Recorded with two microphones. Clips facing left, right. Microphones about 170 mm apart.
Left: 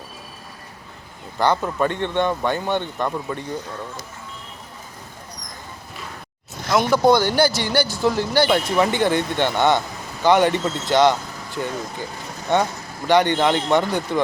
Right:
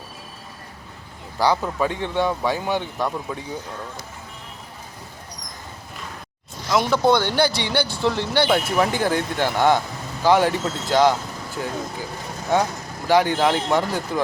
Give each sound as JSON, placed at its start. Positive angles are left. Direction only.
{"t": 1.4, "sound": "speech", "side_deg": 0}
{"t": 6.7, "sound": "speech", "side_deg": 5}